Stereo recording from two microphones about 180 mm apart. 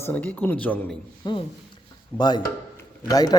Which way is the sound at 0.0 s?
10° left (ahead or behind).